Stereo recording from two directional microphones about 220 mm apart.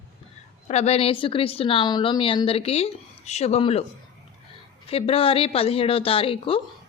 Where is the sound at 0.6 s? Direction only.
30° left (ahead or behind).